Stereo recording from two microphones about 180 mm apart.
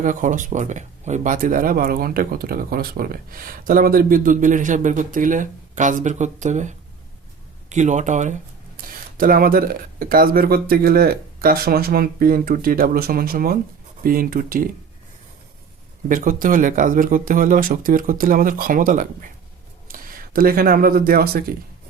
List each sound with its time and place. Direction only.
0.0 s speech: 45° right (ahead or behind)
16.0 s speech: 50° right (ahead or behind)